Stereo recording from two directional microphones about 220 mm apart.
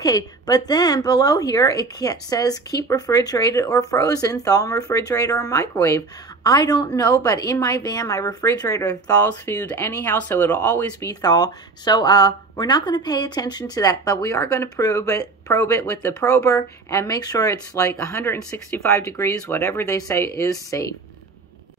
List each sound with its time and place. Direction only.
0.0 s a woman's voice: 15° left (ahead or behind)